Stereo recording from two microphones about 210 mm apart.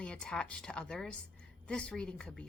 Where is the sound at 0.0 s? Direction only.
5° left (ahead or behind).